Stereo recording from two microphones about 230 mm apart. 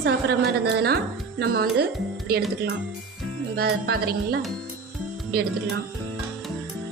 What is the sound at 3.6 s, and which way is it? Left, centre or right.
Speech, right.